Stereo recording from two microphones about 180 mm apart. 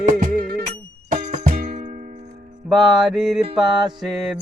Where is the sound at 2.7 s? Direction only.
Centre (ahead or behind).